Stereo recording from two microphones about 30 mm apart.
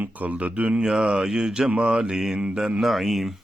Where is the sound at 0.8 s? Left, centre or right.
Right.